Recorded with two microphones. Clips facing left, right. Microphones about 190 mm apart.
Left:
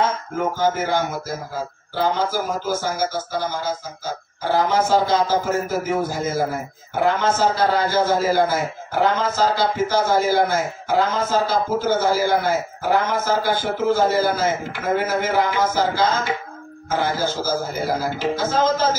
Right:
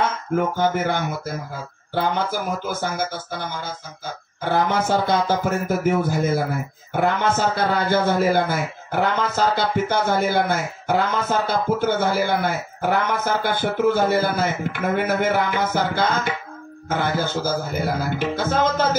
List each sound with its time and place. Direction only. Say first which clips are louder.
0.6 s a man's voice: left 1 dB; 60° right (ahead or behind)